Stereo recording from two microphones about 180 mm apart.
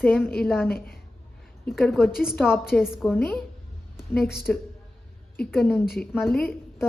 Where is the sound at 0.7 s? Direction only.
60° left (ahead or behind).